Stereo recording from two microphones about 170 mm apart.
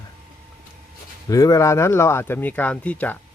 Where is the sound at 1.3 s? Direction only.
20° left (ahead or behind).